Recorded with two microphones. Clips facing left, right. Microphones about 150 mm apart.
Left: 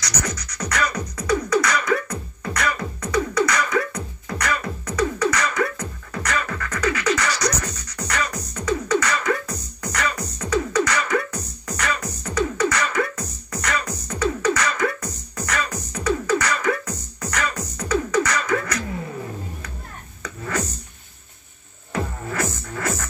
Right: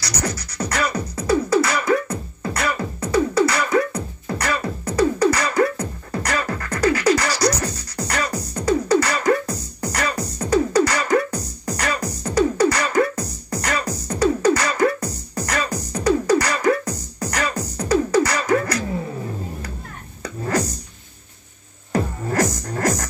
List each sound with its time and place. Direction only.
0.2 s beatboxing: 30° right (ahead or behind)
9.9 s music: 35° right (ahead or behind)
20.2 s a sound: 35° right (ahead or behind)
21.9 s music: 40° right (ahead or behind)